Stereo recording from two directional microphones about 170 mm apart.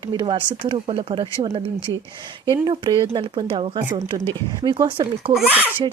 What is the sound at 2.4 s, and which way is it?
A woman's voice, 25° right (ahead or behind).